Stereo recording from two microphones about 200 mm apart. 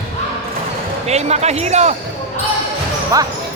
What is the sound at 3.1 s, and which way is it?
Speech, 15° right (ahead or behind).